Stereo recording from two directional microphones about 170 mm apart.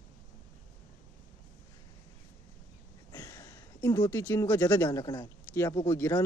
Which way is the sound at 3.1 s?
20° left (ahead or behind).